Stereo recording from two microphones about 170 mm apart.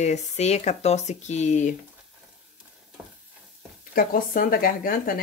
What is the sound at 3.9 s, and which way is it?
Speech, 60° left (ahead or behind).